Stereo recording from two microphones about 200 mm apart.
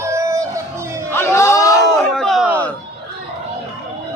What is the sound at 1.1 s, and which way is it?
Crowd, 15° left (ahead or behind).